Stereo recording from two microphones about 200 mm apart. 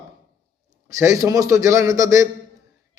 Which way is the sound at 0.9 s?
15° right (ahead or behind).